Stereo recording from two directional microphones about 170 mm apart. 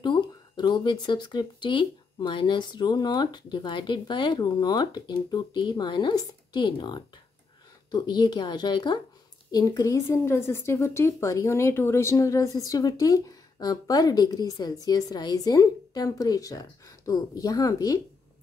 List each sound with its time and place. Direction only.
0.0 s a woman's voice: 25° left (ahead or behind)